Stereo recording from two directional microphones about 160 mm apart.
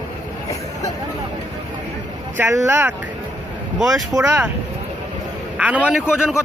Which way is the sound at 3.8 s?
Centre (ahead or behind).